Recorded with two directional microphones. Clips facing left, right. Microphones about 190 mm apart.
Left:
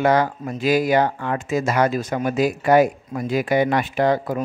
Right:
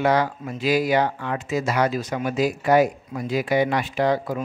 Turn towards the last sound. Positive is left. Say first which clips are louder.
# left 2 dB
turn(degrees=50)  # may be behind; listen again after turning